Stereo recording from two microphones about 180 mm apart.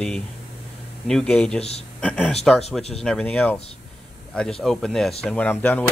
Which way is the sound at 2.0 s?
5° left (ahead or behind).